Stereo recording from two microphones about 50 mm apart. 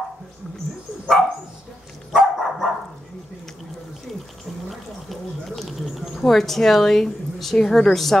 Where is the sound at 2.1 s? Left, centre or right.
Centre.